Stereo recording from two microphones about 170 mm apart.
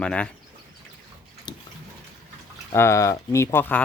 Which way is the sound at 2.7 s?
15° left (ahead or behind).